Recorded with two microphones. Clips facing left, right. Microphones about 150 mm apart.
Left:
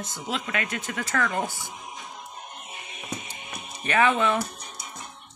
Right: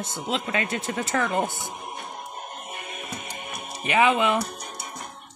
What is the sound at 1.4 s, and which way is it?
Speech, 55° right (ahead or behind).